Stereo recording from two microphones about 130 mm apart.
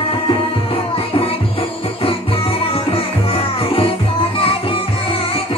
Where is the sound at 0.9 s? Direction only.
45° left (ahead or behind).